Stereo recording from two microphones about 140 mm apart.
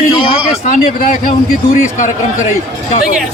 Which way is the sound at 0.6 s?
70° left (ahead or behind).